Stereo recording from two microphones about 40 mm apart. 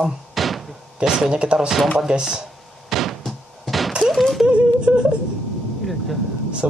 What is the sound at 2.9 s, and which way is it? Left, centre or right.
Thunk, centre.